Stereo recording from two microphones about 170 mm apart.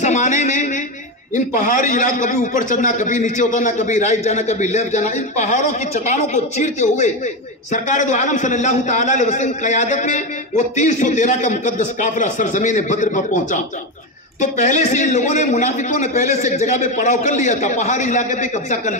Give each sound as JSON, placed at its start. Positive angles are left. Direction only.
{"t": 0.0, "sound": "a man's voice", "side_deg": 45}